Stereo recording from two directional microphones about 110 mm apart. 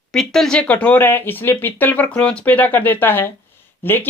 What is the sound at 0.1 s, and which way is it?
Speech, 5° left (ahead or behind).